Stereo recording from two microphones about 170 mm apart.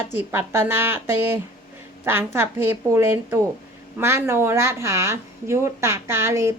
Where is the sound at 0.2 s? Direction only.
15° right (ahead or behind).